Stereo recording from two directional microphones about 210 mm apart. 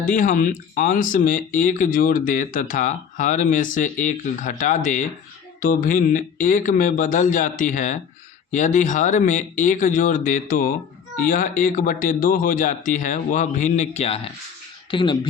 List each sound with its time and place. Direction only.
0.0 s speech: 40° left (ahead or behind); by 15.3 s 25° left (ahead or behind)